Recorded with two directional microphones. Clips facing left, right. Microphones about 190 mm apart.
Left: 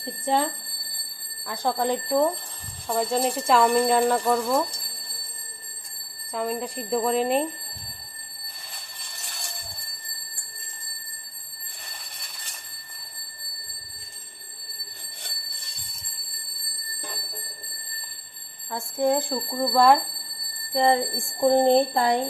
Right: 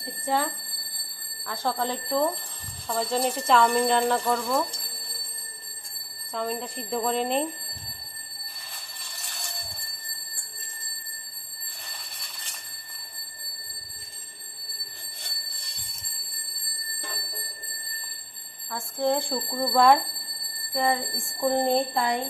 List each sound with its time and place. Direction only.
0.3 s speech: 20° left (ahead or behind)
6.3 s speech: 5° left (ahead or behind)
18.7 s bell: 20° left (ahead or behind)
19.1 s speech: centre (ahead or behind)
20.7 s bell: 25° left (ahead or behind)